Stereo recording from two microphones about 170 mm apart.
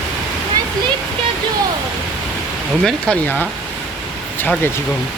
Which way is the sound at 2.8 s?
10° left (ahead or behind).